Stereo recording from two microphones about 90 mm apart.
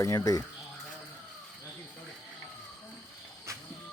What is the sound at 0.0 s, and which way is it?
Speech, 40° left (ahead or behind).